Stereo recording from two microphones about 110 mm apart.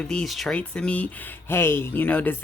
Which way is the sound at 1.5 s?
25° left (ahead or behind).